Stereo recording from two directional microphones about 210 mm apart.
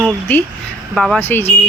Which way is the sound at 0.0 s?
10° left (ahead or behind).